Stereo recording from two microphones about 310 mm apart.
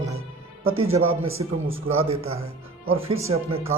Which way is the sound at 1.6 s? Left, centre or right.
Right.